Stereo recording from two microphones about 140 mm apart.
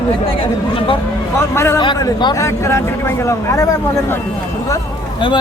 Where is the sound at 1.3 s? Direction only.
20° left (ahead or behind).